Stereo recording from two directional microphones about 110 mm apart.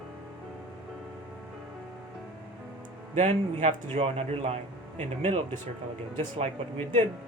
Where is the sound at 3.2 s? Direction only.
90° right.